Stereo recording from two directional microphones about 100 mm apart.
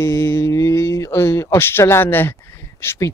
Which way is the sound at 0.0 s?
30° left (ahead or behind).